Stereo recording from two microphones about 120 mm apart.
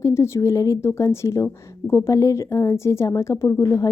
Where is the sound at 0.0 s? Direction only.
20° left (ahead or behind).